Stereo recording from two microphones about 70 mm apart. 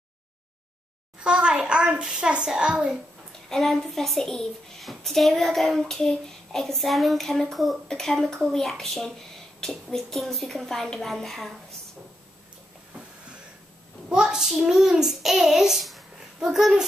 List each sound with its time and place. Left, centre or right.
1.2 s a child's voice: centre
3.4 s a child's voice: centre
14.0 s a child's voice: centre